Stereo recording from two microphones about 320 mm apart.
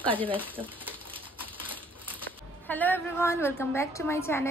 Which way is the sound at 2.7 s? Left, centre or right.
Centre.